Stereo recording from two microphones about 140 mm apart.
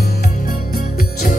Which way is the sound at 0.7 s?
80° left.